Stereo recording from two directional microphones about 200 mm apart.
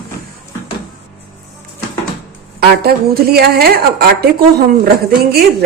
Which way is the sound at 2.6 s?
50° right (ahead or behind).